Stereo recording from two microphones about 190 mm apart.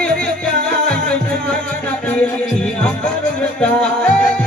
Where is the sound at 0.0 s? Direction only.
5° left (ahead or behind).